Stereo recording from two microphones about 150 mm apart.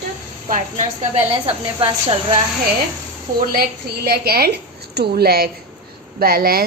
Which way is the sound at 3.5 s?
90° right.